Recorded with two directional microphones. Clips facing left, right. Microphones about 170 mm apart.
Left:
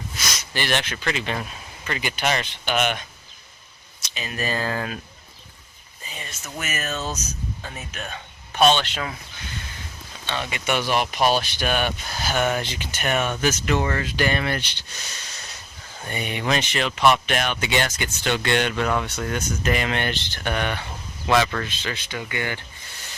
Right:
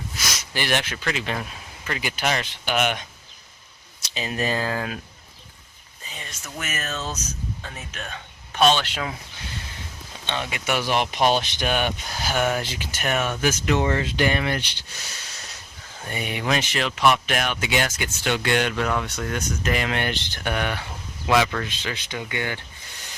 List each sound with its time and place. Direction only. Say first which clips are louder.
0.5 s speech: even; 10° right (ahead or behind)
4.0 s speech: right 3 dB; 30° right (ahead or behind); by 4.9 s 10° right (ahead or behind)
6.1 s speech: left 1 dB; 5° left (ahead or behind); by 9.1 s 10° right (ahead or behind)
10.2 s speech: even; 15° right (ahead or behind)
10.5 s speech: left 1 dB; 5° right (ahead or behind)
10.9 s speech: right 1 dB; 20° right (ahead or behind)
16.0 s speech: even; 5° right (ahead or behind)